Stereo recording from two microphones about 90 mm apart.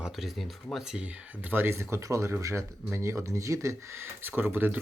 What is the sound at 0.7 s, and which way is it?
Speech, 5° right (ahead or behind).